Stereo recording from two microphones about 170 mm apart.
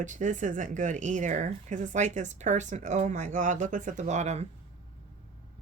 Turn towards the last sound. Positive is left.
turn(degrees=-40)  # may be behind; listen again after turning